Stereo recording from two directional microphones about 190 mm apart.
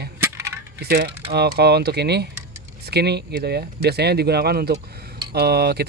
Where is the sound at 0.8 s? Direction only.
60° right (ahead or behind).